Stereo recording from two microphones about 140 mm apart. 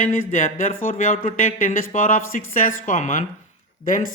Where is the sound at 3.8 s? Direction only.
75° left (ahead or behind).